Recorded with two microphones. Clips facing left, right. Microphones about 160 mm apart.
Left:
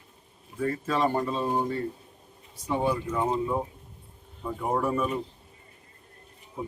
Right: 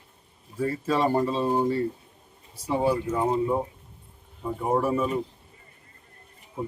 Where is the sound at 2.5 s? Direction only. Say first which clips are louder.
Right 3 dB; 10° right (ahead or behind).